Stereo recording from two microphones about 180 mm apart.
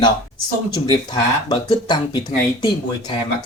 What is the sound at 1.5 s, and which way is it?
Speech, 25° left (ahead or behind).